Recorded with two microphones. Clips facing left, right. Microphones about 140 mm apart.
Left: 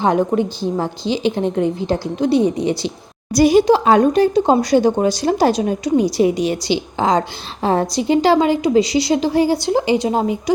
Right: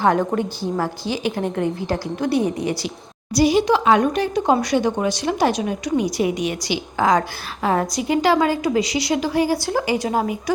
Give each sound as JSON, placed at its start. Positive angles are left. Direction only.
{"t": 0.0, "sound": "a woman's voice", "side_deg": 20}
{"t": 3.3, "sound": "a woman's voice", "side_deg": 50}
{"t": 3.7, "sound": "a woman's voice", "side_deg": 35}